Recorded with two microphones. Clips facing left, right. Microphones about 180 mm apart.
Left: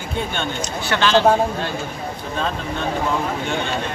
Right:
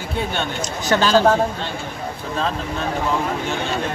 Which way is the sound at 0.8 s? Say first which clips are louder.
Right 1 dB; 40° right (ahead or behind).